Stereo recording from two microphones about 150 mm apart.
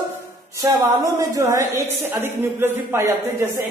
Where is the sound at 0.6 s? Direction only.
15° right (ahead or behind).